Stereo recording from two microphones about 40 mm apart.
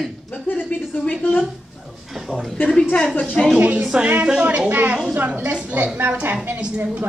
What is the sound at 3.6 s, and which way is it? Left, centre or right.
Speech, right.